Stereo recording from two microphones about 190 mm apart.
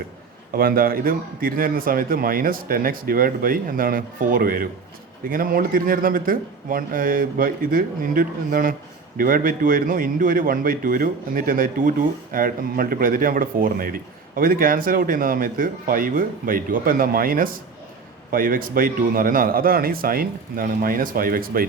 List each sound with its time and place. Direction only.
0.5 s a man's voice: 50° right (ahead or behind)